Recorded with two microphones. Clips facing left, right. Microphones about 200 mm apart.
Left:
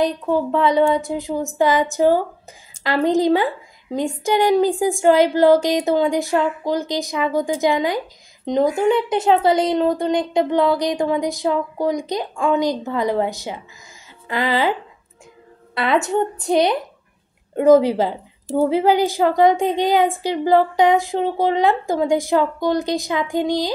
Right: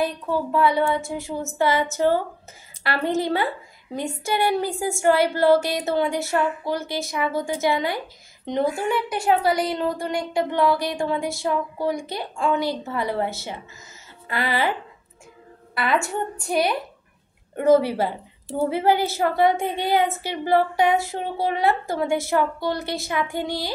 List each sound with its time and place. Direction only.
0.0 s a woman's voice: 20° left (ahead or behind)